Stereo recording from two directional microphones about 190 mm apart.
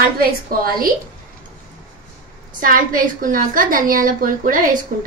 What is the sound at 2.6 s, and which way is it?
A woman's voice, 45° right (ahead or behind).